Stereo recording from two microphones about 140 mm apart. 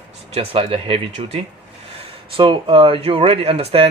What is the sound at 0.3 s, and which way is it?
Speech, 40° right (ahead or behind).